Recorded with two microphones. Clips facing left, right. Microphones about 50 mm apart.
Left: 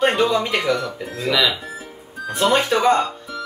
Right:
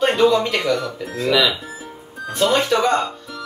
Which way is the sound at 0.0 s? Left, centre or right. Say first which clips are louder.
Right 2 dB; centre.